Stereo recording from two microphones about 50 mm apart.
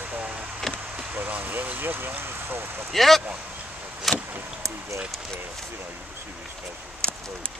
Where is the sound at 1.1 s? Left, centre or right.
Right.